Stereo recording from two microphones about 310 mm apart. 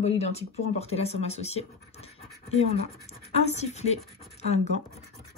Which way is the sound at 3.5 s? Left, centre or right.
Left.